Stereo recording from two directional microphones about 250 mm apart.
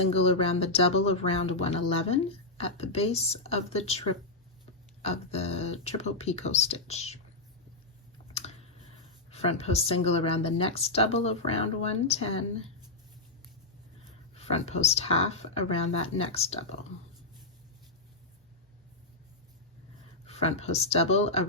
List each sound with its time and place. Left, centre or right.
0.1 s speech: left
5.0 s speech: left
9.3 s speech: left
14.3 s speech: left
20.2 s speech: left